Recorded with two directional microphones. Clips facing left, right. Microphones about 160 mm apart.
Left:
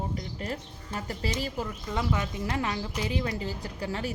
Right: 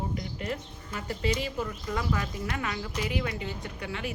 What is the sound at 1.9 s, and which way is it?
A woman's voice, 20° left (ahead or behind).